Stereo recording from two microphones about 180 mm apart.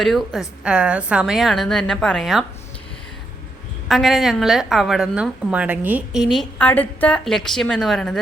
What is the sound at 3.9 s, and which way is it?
A woman's voice, centre (ahead or behind).